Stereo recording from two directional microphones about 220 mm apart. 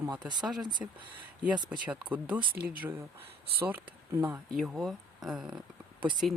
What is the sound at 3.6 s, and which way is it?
Speech, 10° right (ahead or behind).